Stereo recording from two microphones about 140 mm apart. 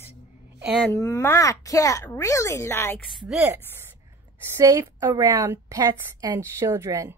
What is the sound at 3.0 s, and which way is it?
Speech, centre (ahead or behind).